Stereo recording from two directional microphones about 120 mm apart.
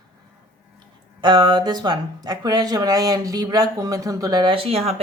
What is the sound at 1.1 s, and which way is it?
Speech, 40° right (ahead or behind).